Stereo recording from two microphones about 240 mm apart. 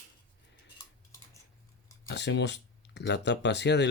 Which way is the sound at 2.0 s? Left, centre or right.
Left.